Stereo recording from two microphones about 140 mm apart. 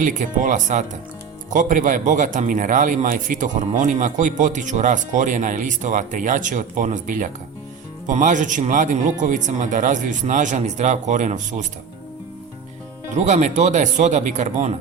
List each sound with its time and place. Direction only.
0.0 s speech: 65° right (ahead or behind)
13.1 s speech: 55° right (ahead or behind)